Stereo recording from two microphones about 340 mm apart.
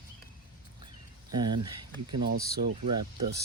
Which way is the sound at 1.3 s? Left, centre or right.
Centre.